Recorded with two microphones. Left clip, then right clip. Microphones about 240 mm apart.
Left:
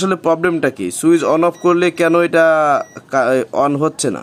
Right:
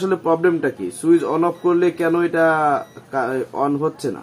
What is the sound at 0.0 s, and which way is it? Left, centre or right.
A man's voice, left.